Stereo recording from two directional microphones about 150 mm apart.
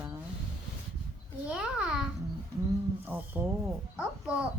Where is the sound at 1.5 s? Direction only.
5° right (ahead or behind).